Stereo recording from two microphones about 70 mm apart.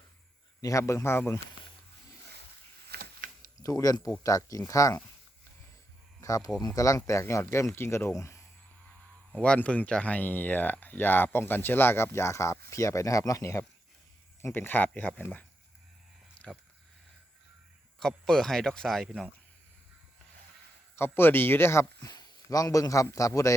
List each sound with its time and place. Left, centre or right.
0.6 s speech: left
3.6 s speech: left
6.1 s speech: left
9.3 s speech: centre; by 13.7 s left
14.5 s speech: left
18.0 s speech: centre
20.9 s speech: left
22.0 s a sound: left
22.4 s speech: left